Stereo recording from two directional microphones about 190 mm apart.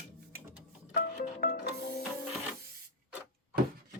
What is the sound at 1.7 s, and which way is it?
Music, 65° left (ahead or behind).